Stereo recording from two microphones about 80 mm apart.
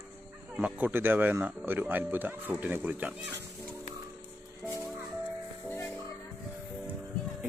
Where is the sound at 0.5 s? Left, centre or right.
Centre.